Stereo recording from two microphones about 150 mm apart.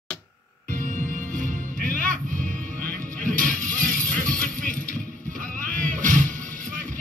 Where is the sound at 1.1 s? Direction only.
60° right (ahead or behind).